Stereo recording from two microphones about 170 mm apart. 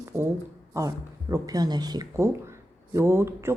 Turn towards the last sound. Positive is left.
turn(degrees=-15)  # may be behind; listen again after turning